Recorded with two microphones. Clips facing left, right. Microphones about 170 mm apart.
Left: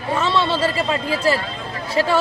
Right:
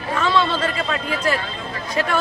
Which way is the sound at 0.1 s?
30° left (ahead or behind).